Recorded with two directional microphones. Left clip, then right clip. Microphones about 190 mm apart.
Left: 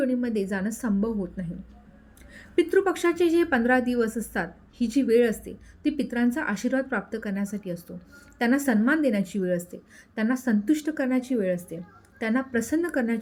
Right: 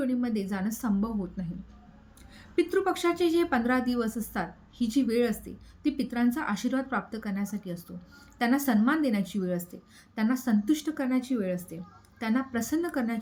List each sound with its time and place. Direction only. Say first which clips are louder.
0.0 s a woman's voice: left 4 dB; 15° left (ahead or behind)